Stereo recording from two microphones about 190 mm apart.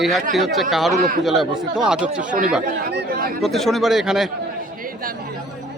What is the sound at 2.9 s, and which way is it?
Speech, 55° right (ahead or behind).